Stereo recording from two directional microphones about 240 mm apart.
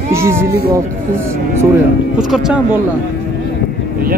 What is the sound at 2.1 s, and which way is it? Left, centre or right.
Speech, centre.